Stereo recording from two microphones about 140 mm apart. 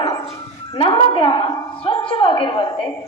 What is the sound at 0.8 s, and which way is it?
A woman's voice, 40° left (ahead or behind).